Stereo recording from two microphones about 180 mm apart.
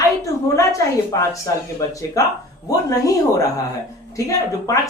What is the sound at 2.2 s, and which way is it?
A woman's voice, 20° left (ahead or behind).